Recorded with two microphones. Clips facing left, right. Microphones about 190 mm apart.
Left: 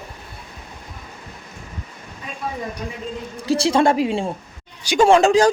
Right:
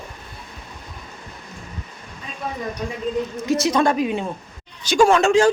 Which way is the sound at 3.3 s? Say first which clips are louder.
Left 4 dB; 30° left (ahead or behind).